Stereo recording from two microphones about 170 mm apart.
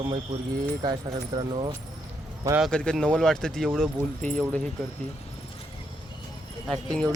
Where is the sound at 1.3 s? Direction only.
30° right (ahead or behind).